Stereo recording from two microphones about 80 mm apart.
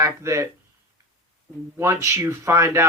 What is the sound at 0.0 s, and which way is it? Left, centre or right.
Speech, right.